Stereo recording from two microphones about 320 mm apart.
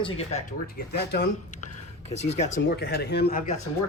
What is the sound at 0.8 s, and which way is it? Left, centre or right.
Speech, left.